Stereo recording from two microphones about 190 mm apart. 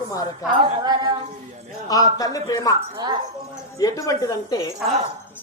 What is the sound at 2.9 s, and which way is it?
Speech, 20° right (ahead or behind).